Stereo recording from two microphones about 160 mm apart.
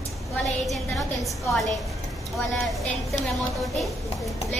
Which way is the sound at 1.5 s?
Centre (ahead or behind).